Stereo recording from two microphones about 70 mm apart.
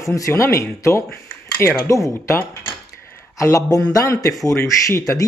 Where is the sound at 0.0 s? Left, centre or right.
Left.